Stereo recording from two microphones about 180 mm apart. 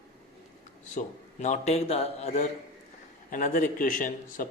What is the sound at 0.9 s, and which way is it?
A man's voice, 40° left (ahead or behind).